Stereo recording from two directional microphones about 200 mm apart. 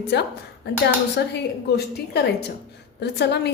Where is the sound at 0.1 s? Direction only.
60° left (ahead or behind).